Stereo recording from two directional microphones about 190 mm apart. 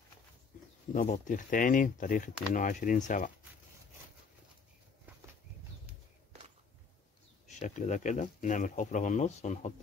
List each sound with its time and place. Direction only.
0.9 s speech: 40° left (ahead or behind)
7.4 s speech: 40° left (ahead or behind)